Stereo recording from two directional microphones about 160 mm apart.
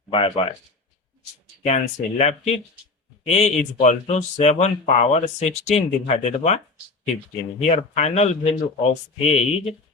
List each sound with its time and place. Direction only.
0.1 s speech: 35° left (ahead or behind)
1.6 s speech: 45° left (ahead or behind)
7.6 s speech: 45° left (ahead or behind)